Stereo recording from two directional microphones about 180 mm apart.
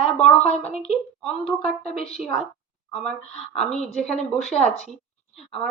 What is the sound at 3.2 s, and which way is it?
Speech, 35° left (ahead or behind).